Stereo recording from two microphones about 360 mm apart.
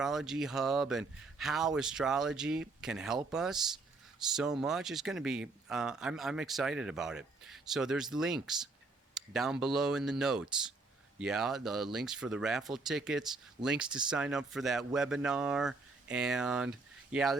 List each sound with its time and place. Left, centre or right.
0.0 s speech: centre